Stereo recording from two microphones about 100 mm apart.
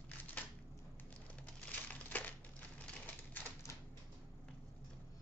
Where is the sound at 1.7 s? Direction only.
15° left (ahead or behind).